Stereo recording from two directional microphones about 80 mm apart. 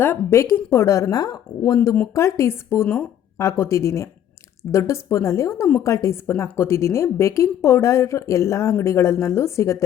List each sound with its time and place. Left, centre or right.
0.0 s a woman's voice: left
1.2 s a woman's voice: left
3.3 s a woman's voice: left